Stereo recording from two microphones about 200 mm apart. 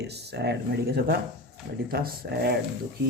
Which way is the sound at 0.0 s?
55° right (ahead or behind).